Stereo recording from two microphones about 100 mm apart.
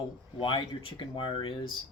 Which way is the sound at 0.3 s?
55° left (ahead or behind).